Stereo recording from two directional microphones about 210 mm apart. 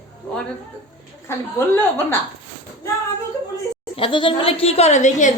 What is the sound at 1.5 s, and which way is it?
Speech, 10° left (ahead or behind).